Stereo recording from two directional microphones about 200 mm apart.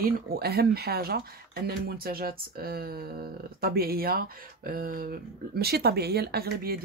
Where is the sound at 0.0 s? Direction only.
50° right (ahead or behind).